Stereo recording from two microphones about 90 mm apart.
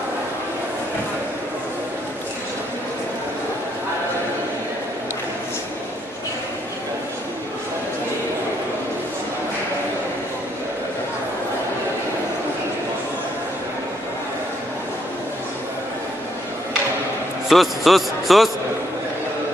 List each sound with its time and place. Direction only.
17.5 s a man's voice: centre (ahead or behind)